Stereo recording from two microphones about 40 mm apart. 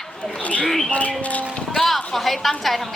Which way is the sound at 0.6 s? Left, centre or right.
Centre.